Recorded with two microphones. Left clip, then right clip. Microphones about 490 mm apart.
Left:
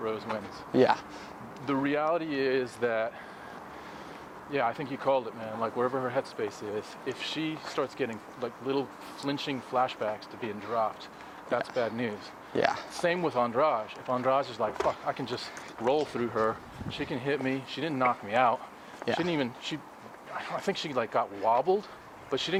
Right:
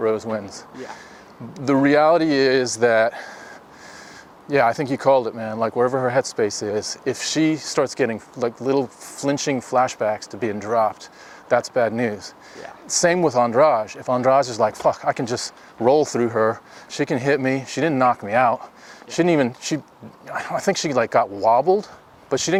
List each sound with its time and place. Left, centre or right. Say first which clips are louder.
0.0 s speech: right 11 dB; right
1.6 s speech: right 13 dB; right
4.5 s speech: right 12 dB; right
19.2 s speech: right 12 dB; right